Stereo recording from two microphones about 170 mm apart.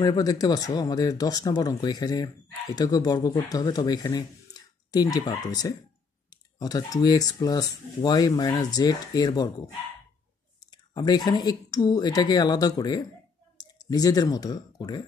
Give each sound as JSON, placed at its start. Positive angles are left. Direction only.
{"t": 0.0, "sound": "speech", "side_deg": 25}
{"t": 10.7, "sound": "speech", "side_deg": 25}